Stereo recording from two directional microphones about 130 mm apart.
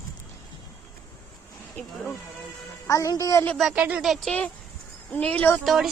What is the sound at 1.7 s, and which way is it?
Music, 5° left (ahead or behind).